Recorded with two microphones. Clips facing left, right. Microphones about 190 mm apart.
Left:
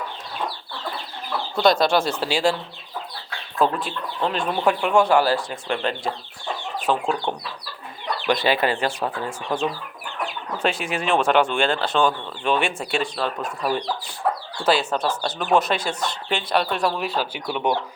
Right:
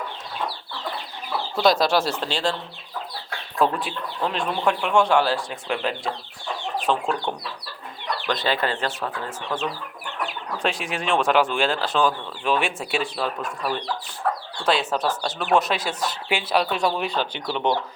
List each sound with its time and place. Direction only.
1.3 s speech: 5° right (ahead or behind)
2.2 s speech: 10° left (ahead or behind)
3.6 s speech: centre (ahead or behind)
10.6 s speech: centre (ahead or behind)
13.7 s speech: 10° left (ahead or behind)
14.6 s speech: centre (ahead or behind)